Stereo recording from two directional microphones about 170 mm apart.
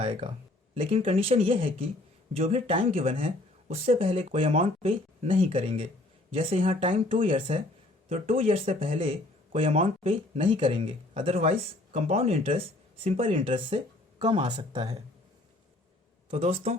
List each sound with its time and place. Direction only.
0.1 s speech: 35° right (ahead or behind)
16.3 s speech: 35° right (ahead or behind)